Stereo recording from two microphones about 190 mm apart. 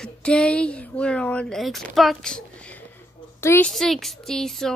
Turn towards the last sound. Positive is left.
turn(degrees=0)  # may be behind; listen again after turning